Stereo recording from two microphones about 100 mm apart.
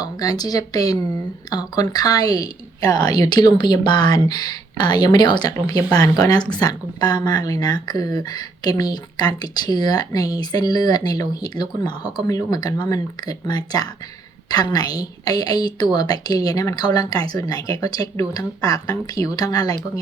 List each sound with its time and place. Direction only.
0.0 s a woman's voice: 40° left (ahead or behind)